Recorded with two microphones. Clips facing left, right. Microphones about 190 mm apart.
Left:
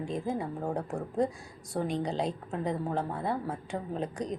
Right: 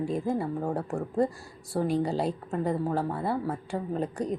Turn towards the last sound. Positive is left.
turn(degrees=-5)  # may be behind; listen again after turning